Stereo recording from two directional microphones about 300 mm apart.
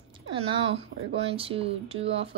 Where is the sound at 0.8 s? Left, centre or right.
Centre.